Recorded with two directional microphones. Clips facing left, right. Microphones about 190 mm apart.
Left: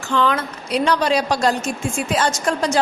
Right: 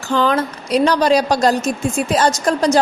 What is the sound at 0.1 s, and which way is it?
A woman's voice, 35° right (ahead or behind).